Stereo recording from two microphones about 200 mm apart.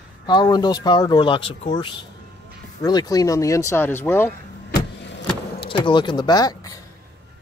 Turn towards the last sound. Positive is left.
turn(degrees=20)  # may be behind; listen again after turning